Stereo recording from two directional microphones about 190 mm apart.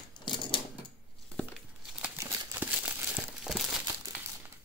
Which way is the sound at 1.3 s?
5° right (ahead or behind).